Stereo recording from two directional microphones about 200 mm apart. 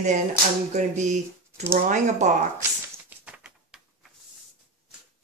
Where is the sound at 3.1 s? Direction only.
5° right (ahead or behind).